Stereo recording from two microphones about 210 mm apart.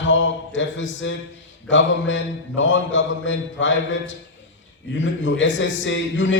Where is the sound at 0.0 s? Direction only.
60° left (ahead or behind).